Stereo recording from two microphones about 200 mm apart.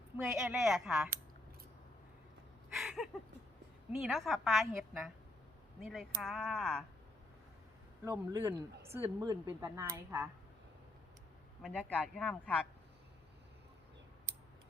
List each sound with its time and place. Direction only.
0.3 s a woman's voice: centre (ahead or behind)
2.7 s a woman's voice: centre (ahead or behind)
8.0 s a woman's voice: 15° right (ahead or behind)
11.6 s a woman's voice: 5° left (ahead or behind)